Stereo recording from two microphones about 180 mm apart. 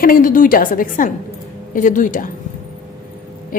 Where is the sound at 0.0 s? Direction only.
50° left (ahead or behind).